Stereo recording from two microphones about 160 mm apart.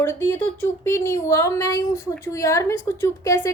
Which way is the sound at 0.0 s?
15° left (ahead or behind).